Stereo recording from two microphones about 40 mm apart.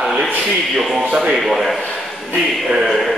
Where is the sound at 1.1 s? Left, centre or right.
Centre.